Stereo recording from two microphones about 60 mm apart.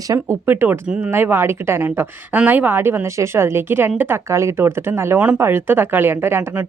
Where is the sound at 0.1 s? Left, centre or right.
Right.